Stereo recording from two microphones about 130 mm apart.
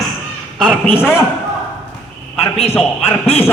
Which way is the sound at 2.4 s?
50° left (ahead or behind).